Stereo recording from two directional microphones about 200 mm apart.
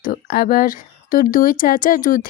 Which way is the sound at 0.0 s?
45° left (ahead or behind).